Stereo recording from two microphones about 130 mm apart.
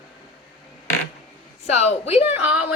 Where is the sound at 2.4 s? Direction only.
10° right (ahead or behind).